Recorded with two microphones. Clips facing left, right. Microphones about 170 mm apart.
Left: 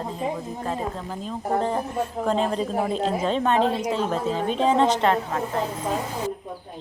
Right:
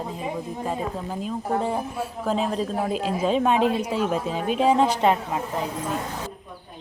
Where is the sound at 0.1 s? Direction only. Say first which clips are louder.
Left 1 dB; 10° right (ahead or behind).